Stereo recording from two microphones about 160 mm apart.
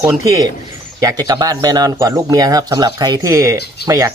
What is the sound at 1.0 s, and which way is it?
Speech, 25° right (ahead or behind).